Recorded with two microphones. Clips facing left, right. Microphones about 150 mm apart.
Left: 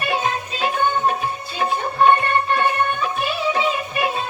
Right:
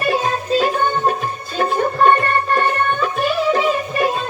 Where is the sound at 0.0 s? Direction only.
40° right (ahead or behind).